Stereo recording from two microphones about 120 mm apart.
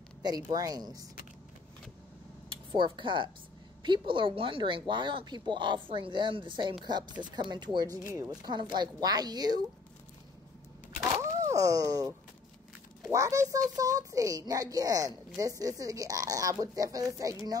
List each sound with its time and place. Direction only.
0.2 s speech: 35° right (ahead or behind)
2.5 s speech: 40° right (ahead or behind)
11.1 s a sound: 25° right (ahead or behind)
13.1 s a child's voice: 25° right (ahead or behind)